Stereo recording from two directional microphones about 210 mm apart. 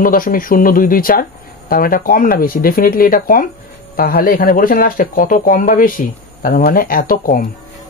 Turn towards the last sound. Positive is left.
turn(degrees=40)  # may be behind; listen again after turning